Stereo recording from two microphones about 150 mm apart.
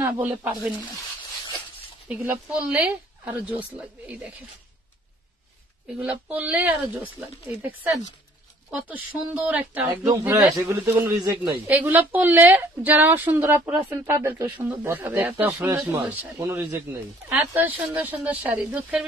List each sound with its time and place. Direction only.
0.0 s speech: 10° right (ahead or behind)
2.1 s speech: 10° right (ahead or behind)
6.2 s speech: 10° right (ahead or behind)
10.0 s a man's voice: 20° right (ahead or behind)
11.6 s a man's voice: 10° right (ahead or behind)